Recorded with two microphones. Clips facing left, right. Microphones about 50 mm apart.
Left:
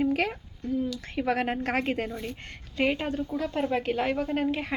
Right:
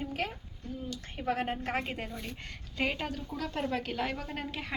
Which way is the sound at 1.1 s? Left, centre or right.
Left.